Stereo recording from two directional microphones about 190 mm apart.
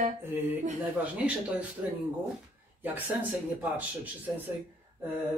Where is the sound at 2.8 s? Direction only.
10° right (ahead or behind).